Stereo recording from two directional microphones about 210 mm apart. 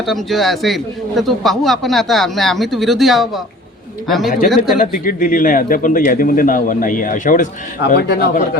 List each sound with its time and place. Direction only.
0.0 s a man's voice: centre (ahead or behind)
4.4 s a man's voice: centre (ahead or behind)
4.8 s a man's voice: 40° left (ahead or behind)